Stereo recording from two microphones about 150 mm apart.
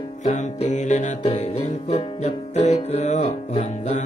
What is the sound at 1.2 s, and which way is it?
Music, 35° left (ahead or behind).